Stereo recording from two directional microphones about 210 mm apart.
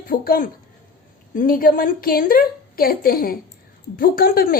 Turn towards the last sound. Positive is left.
turn(degrees=45)  # may be behind; listen again after turning